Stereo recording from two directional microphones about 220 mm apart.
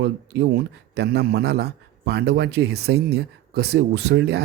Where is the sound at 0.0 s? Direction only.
50° right (ahead or behind).